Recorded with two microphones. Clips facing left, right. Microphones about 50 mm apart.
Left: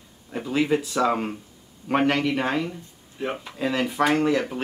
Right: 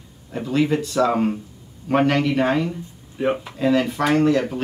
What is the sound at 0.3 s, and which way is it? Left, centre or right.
Speech, centre.